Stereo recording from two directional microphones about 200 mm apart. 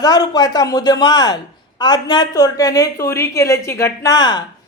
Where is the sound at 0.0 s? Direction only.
20° left (ahead or behind).